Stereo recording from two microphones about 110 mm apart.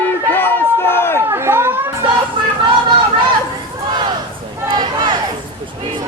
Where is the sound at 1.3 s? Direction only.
25° right (ahead or behind).